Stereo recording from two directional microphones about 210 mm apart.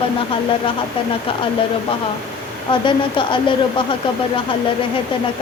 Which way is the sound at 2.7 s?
25° left (ahead or behind).